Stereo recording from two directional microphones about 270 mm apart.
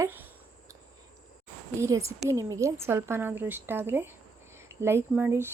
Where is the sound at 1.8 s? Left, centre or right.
Centre.